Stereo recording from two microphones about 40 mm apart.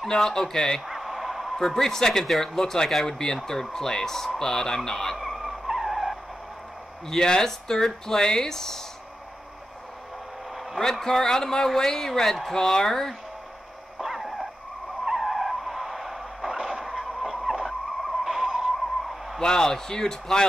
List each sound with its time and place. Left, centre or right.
0.1 s speech: centre
0.8 s a sound: centre
1.6 s speech: centre
5.2 s vehicle: centre
7.1 s speech: centre
10.8 s speech: centre
14.0 s dog: centre
15.0 s vehicle: centre
17.0 s a sound: centre
19.4 s speech: centre